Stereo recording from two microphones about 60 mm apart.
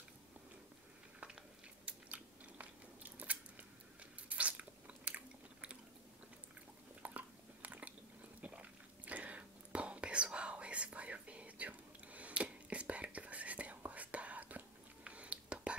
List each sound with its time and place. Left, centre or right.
1.9 s biting: right
7.0 s biting: right
8.4 s whispering: right